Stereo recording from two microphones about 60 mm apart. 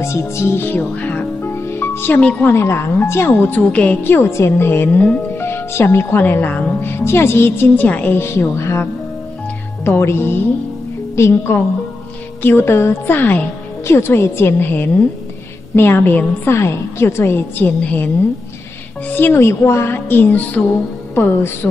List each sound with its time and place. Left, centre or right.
0.0 s speech: left
1.5 s music: left
2.1 s a woman's voice: left
2.5 s a woman's voice: left
4.0 s speech: left
5.4 s a woman's voice: left
9.8 s a woman's voice: left
12.4 s speech: left
13.8 s a woman's voice: left
16.4 s a woman's voice: left
17.6 s a woman's voice: left